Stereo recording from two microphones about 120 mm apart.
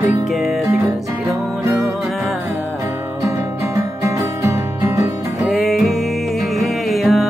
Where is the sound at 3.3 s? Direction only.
25° right (ahead or behind).